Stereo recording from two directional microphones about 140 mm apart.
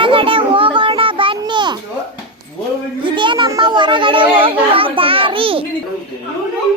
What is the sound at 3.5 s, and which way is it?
Chatter, 30° right (ahead or behind).